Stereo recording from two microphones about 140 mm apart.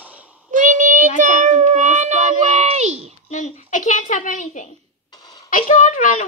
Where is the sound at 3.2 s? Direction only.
60° left (ahead or behind).